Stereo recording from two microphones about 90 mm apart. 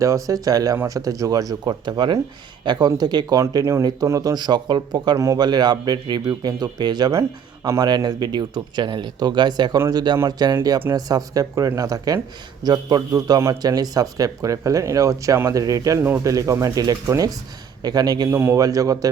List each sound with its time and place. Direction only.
0.0 s speech: 40° right (ahead or behind)
3.3 s speech: 35° right (ahead or behind); by 5.1 s 55° right (ahead or behind)
5.1 s speech: 35° right (ahead or behind)
5.5 s speech: 50° right (ahead or behind)
7.1 s speech: 35° right (ahead or behind)
12.6 s a man's voice: 55° right (ahead or behind)
13.1 s speech: 45° right (ahead or behind)
18.3 s speech: 30° right (ahead or behind)
18.6 s speech: 40° right (ahead or behind)